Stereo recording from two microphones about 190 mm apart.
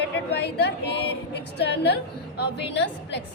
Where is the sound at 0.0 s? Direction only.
60° left (ahead or behind).